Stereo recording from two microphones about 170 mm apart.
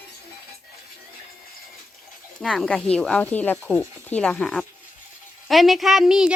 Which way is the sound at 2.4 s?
5° left (ahead or behind).